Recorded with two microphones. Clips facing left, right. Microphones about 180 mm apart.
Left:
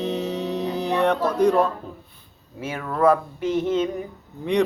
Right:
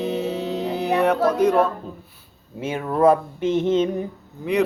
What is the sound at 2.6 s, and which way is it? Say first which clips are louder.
A man's voice: right 2 dB; 25° right (ahead or behind).